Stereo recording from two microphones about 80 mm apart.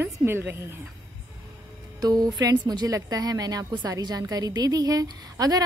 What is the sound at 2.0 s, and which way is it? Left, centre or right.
A woman's voice, right.